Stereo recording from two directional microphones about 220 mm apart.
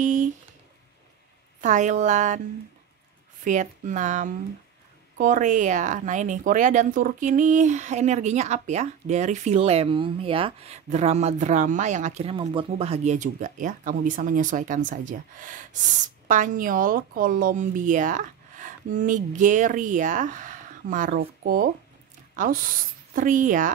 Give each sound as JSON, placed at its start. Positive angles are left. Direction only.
{"t": 0.0, "sound": "a sound", "side_deg": -35}
{"t": 1.6, "sound": "speech", "side_deg": -35}
{"t": 3.4, "sound": "speech", "side_deg": -35}